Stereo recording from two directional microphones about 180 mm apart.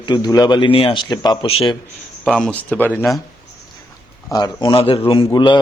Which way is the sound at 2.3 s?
5° left (ahead or behind).